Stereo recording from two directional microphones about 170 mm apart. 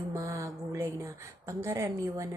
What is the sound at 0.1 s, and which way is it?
A woman's voice, 15° right (ahead or behind).